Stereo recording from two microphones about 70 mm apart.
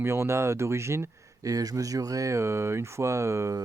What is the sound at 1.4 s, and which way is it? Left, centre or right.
Speech, right.